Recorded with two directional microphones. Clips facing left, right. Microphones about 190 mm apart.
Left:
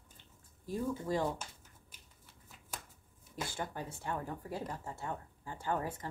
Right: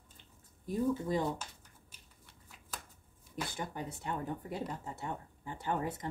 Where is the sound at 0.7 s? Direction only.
20° right (ahead or behind).